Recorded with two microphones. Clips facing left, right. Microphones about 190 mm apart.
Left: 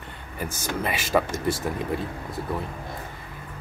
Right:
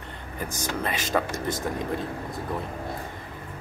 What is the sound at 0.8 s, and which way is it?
Speech, 10° left (ahead or behind).